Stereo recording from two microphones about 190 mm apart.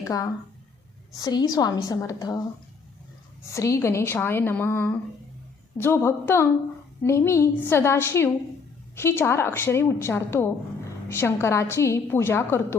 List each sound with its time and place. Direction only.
0.1 s a woman's voice: 20° left (ahead or behind)
3.5 s a woman's voice: 15° left (ahead or behind)